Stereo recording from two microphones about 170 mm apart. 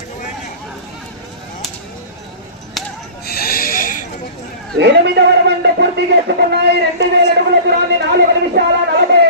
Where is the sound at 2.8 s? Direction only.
Centre (ahead or behind).